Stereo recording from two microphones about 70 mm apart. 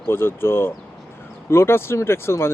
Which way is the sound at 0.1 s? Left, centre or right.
Left.